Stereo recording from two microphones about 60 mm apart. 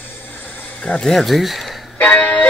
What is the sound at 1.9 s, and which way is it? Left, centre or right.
Music, left.